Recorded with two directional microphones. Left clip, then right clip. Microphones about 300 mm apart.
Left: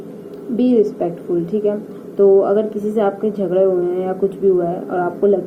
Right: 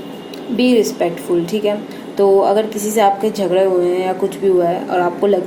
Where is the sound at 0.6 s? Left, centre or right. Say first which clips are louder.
Right 1 dB; centre.